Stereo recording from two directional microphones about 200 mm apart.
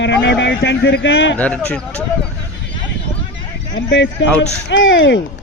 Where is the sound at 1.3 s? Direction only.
5° left (ahead or behind).